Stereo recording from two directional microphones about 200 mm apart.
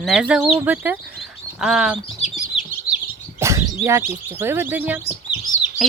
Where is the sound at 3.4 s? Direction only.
15° right (ahead or behind).